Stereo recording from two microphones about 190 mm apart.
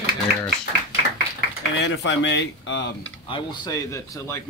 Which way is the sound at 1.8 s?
75° left (ahead or behind).